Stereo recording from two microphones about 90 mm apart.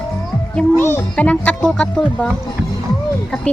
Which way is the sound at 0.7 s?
30° left (ahead or behind).